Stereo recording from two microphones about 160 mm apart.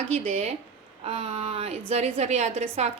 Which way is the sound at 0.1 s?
45° right (ahead or behind).